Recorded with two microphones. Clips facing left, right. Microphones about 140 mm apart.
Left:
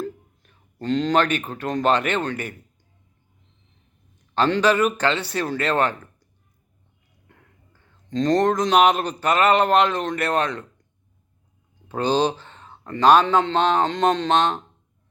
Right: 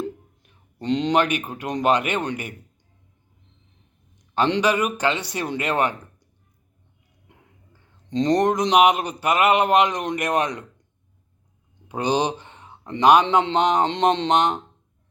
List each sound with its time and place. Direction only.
0.0 s speech: 20° right (ahead or behind)
4.4 s speech: 15° right (ahead or behind)
7.3 s speech: 15° right (ahead or behind)
11.9 s speech: 15° right (ahead or behind)